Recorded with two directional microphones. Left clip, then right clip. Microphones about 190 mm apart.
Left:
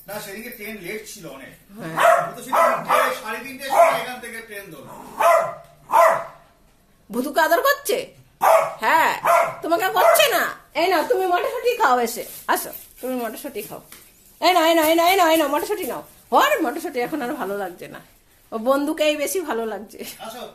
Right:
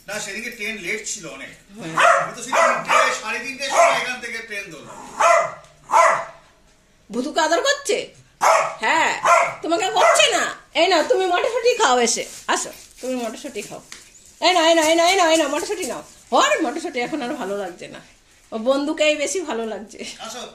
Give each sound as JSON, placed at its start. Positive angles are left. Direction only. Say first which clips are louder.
{"t": 0.0, "sound": "a woman's voice", "louder": "right 4 dB", "side_deg": 0}
{"t": 7.1, "sound": "a woman's voice", "louder": "left 1 dB", "side_deg": 0}
{"t": 10.7, "sound": "speech", "louder": "right 3 dB", "side_deg": -15}
{"t": 11.2, "sound": "speech", "louder": "right 2 dB", "side_deg": -30}
{"t": 12.6, "sound": "a woman's voice", "louder": "right 1 dB", "side_deg": 0}